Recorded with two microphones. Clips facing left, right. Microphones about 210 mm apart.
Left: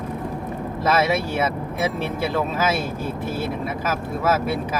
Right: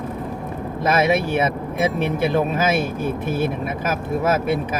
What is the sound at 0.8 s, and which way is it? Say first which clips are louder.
Speech: right 2 dB; 15° right (ahead or behind).